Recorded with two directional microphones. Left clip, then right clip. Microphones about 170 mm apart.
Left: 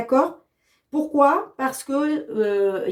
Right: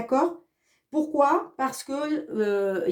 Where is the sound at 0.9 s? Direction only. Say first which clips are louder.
Left 4 dB; 40° right (ahead or behind).